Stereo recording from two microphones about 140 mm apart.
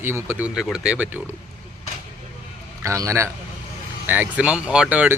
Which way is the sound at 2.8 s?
20° right (ahead or behind).